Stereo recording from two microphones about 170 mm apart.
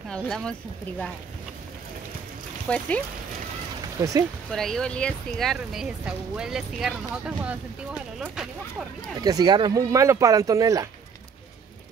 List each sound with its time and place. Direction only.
0.1 s speech: 5° left (ahead or behind)
2.7 s speech: 5° left (ahead or behind)
4.0 s speech: 15° right (ahead or behind)
4.5 s speech: centre (ahead or behind)
9.2 s speech: 20° right (ahead or behind)